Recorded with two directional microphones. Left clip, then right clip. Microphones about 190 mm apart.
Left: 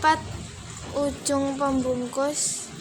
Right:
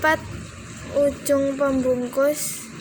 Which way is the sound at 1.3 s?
10° right (ahead or behind).